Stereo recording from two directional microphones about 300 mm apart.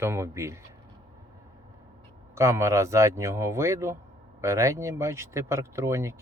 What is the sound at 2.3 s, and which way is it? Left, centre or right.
Speech, centre.